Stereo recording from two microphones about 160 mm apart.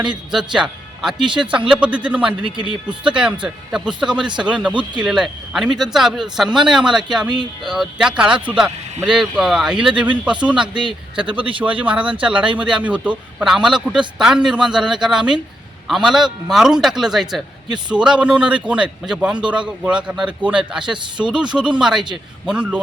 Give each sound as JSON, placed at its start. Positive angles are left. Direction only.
{"t": 0.0, "sound": "a man's voice", "side_deg": -5}
{"t": 2.6, "sound": "speech", "side_deg": -30}
{"t": 3.1, "sound": "a man's voice", "side_deg": -5}
{"t": 11.3, "sound": "speech", "side_deg": -35}
{"t": 11.6, "sound": "a man's voice", "side_deg": -10}